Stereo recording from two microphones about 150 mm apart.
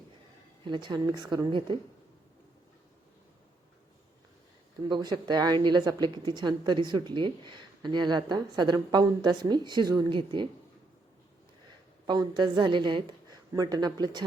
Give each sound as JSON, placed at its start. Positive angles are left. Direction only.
{"t": 0.6, "sound": "a woman's voice", "side_deg": -30}
{"t": 4.9, "sound": "a woman's voice", "side_deg": -30}
{"t": 12.0, "sound": "a woman's voice", "side_deg": -30}